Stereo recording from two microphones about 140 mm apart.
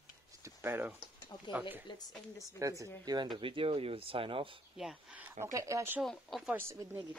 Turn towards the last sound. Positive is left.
turn(degrees=-20)  # may be behind; listen again after turning